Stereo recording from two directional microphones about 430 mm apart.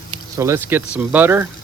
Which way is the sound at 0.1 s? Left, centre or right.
Centre.